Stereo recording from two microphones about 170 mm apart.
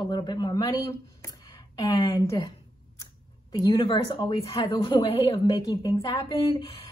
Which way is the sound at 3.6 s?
30° left (ahead or behind).